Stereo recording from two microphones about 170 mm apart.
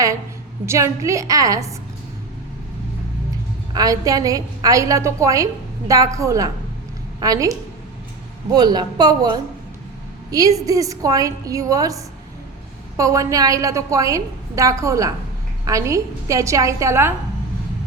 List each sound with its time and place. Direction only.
0.6 s a woman's voice: 15° right (ahead or behind)
3.7 s a woman's voice: 20° right (ahead or behind)